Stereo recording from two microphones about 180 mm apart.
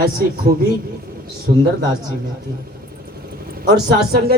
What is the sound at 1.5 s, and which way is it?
Speech, 55° right (ahead or behind).